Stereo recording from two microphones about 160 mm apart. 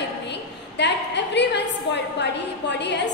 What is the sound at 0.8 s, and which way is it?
A woman's voice, 90° left.